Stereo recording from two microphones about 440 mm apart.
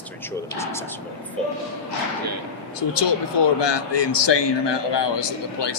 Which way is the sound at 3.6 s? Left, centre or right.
Left.